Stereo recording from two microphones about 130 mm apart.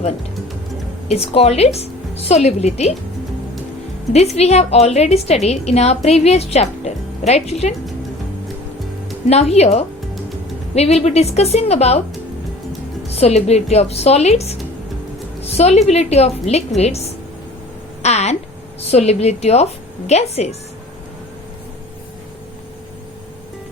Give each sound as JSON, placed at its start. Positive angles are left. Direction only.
{"t": 1.0, "sound": "a woman's voice", "side_deg": 50}
{"t": 4.4, "sound": "a woman's voice", "side_deg": 55}
{"t": 9.3, "sound": "a woman's voice", "side_deg": 55}
{"t": 13.1, "sound": "a woman's voice", "side_deg": 55}
{"t": 18.0, "sound": "a sound", "side_deg": 55}
{"t": 18.9, "sound": "a woman's voice", "side_deg": 55}